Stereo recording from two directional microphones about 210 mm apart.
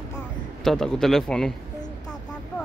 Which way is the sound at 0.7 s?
5° left (ahead or behind).